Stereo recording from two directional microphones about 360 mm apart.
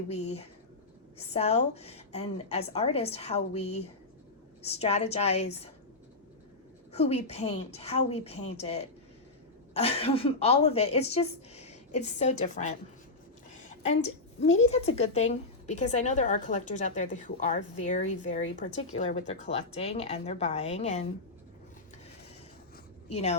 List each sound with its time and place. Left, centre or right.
0.1 s speech: centre
6.9 s speech: centre
14.4 s a woman's voice: centre
23.0 s speech: centre